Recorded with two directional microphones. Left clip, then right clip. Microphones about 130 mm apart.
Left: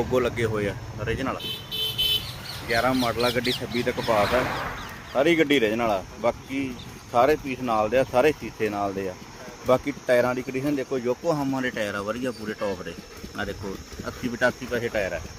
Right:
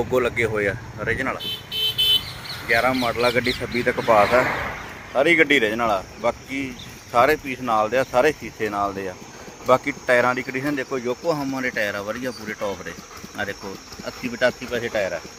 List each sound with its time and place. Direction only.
0.1 s speech: centre (ahead or behind)
2.6 s speech: 5° right (ahead or behind)
4.4 s speech: 50° right (ahead or behind)
5.1 s speech: 15° left (ahead or behind)
14.3 s speech: 25° left (ahead or behind)